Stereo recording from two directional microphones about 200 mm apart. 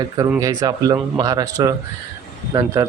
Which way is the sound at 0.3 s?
15° right (ahead or behind).